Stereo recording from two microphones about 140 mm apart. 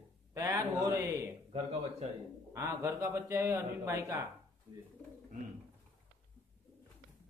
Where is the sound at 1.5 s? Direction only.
45° right (ahead or behind).